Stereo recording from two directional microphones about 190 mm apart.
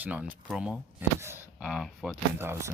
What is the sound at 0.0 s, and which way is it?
Speech, 10° right (ahead or behind).